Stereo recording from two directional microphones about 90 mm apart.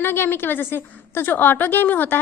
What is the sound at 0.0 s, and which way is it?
A woman's voice, 25° left (ahead or behind).